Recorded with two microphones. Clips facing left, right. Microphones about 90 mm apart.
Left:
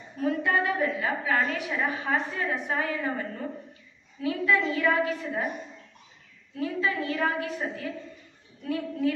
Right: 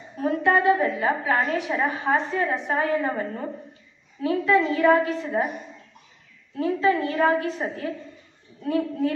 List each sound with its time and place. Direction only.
0.2 s a woman's voice: 30° right (ahead or behind)
6.5 s a woman's voice: 30° right (ahead or behind)